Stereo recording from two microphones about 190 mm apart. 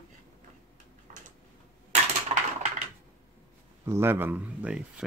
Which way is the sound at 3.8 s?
15° right (ahead or behind).